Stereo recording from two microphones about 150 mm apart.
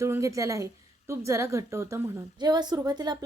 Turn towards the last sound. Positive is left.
turn(degrees=-30)  # may be behind; listen again after turning